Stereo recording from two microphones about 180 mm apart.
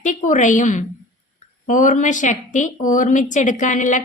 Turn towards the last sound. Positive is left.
turn(degrees=45)  # may be behind; listen again after turning